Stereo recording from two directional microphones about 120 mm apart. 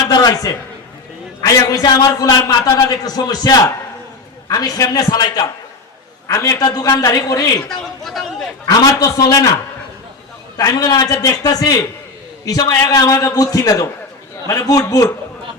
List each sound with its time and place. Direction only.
0.1 s a man's voice: 35° left (ahead or behind)
7.7 s a sound: 5° left (ahead or behind)
8.6 s a man's voice: 30° left (ahead or behind)
10.6 s a man's voice: 30° left (ahead or behind)